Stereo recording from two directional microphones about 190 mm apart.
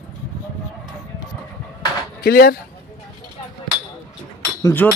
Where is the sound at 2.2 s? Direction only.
55° left (ahead or behind).